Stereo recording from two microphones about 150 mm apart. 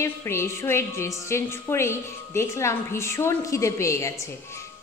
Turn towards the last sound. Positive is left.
turn(degrees=20)  # may be behind; listen again after turning